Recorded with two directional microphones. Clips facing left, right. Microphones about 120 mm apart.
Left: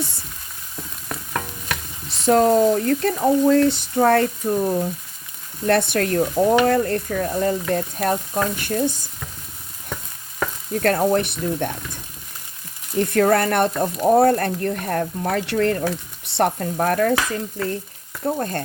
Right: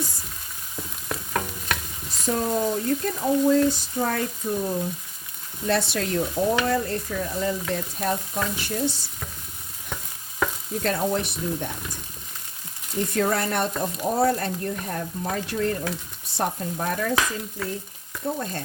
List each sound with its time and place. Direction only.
2.0 s speech: 70° left (ahead or behind)
5.6 s stir: 55° left (ahead or behind)
10.8 s stir: 60° left (ahead or behind)
13.0 s stir: 60° left (ahead or behind)
16.2 s speech: 70° left (ahead or behind)
16.7 s stir: 60° left (ahead or behind)
18.2 s frying: 55° left (ahead or behind)